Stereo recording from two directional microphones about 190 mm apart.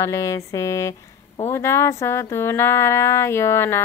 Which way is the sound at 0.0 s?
15° left (ahead or behind).